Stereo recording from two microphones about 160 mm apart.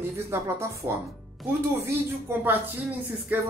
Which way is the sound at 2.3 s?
15° right (ahead or behind).